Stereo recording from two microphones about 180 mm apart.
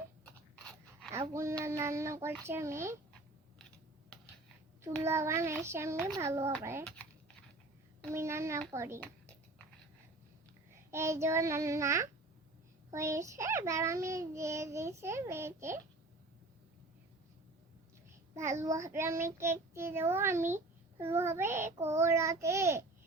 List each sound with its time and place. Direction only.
0.5 s dog: 5° left (ahead or behind)
1.3 s a child's voice: 15° right (ahead or behind)
5.0 s a child's voice: 15° right (ahead or behind)
6.8 s speech: 5° left (ahead or behind)
8.1 s a child's voice: 15° right (ahead or behind)
9.0 s a sound: 5° left (ahead or behind)
10.9 s a child's voice: 15° right (ahead or behind)
18.6 s a child's voice: 15° right (ahead or behind)